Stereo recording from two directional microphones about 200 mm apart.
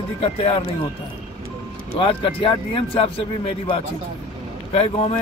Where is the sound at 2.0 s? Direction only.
25° left (ahead or behind).